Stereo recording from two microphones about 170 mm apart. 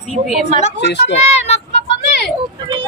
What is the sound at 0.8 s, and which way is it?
Speech, 90° left.